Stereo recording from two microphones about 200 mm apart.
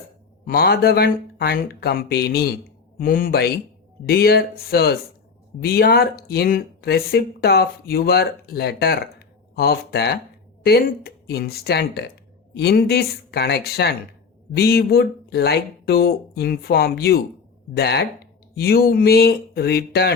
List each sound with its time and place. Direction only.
0.4 s speech: 50° left (ahead or behind)